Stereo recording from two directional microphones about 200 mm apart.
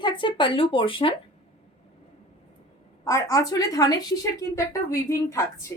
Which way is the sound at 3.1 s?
15° left (ahead or behind).